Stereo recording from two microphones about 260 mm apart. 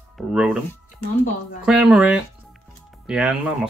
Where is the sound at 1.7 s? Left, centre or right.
Centre.